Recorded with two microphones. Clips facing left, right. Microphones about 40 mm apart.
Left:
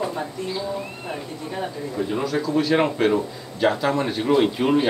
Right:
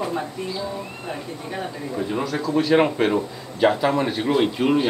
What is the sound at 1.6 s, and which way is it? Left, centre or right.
Speech, centre.